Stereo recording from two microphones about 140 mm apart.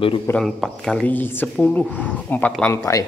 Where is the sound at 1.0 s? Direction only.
15° left (ahead or behind).